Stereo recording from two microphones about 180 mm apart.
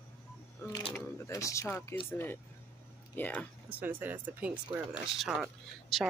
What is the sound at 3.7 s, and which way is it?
Speech, 10° right (ahead or behind).